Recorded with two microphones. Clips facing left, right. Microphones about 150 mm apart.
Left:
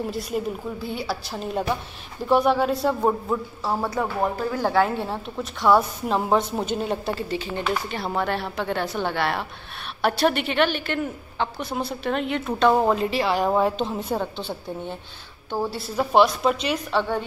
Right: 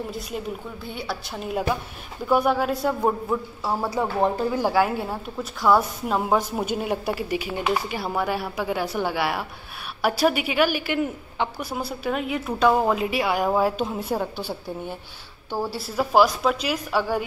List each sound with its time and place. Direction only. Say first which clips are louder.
0.8 s a woman's voice: left 1 dB; 5° left (ahead or behind)
4.2 s speech: right 4 dB; 25° right (ahead or behind)
4.6 s a woman's voice: left 3 dB; 10° right (ahead or behind)
15.5 s a woman's voice: left 1 dB; 5° right (ahead or behind)